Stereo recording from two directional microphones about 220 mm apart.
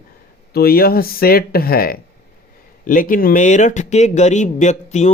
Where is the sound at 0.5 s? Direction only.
45° left (ahead or behind).